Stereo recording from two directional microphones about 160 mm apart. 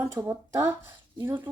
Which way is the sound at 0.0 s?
20° right (ahead or behind).